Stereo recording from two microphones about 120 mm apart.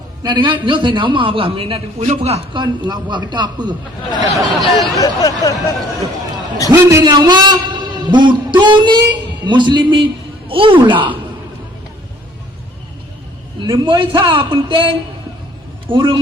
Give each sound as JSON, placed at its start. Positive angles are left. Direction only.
{"t": 0.2, "sound": "a man's voice", "side_deg": -40}
{"t": 2.5, "sound": "a man's voice", "side_deg": -40}
{"t": 4.4, "sound": "speech", "side_deg": 0}
{"t": 4.9, "sound": "speech", "side_deg": 30}
{"t": 6.7, "sound": "a man's voice", "side_deg": -30}
{"t": 13.7, "sound": "a man's voice", "side_deg": -40}